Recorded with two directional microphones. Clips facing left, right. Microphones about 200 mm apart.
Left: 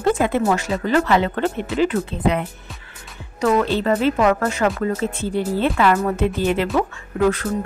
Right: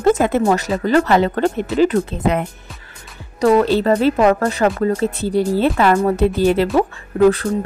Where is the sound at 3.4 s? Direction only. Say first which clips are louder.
Right 5 dB; 35° right (ahead or behind).